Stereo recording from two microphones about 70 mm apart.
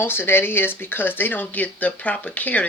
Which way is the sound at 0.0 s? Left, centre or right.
Left.